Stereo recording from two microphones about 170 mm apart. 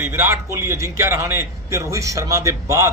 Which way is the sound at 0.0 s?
15° right (ahead or behind).